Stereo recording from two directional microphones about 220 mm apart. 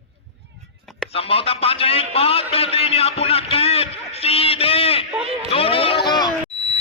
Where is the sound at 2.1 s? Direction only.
25° left (ahead or behind).